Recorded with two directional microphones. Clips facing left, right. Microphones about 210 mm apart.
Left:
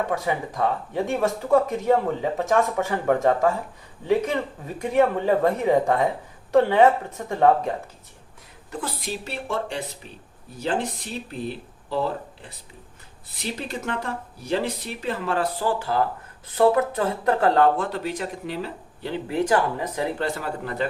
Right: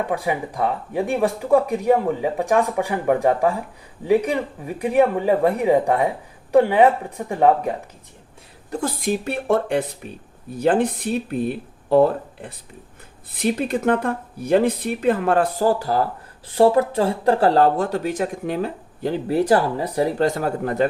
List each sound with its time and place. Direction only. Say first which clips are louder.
0.1 s speech: right 2 dB; 15° right (ahead or behind)
8.7 s speech: right 8 dB; 45° right (ahead or behind)